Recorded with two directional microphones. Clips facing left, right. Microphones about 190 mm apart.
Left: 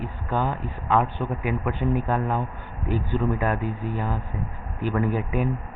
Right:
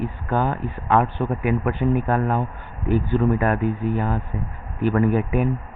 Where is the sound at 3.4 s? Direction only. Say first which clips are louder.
Right 5 dB; 60° right (ahead or behind).